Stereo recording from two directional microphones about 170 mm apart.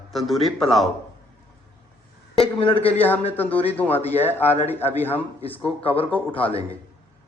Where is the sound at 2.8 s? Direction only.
10° left (ahead or behind).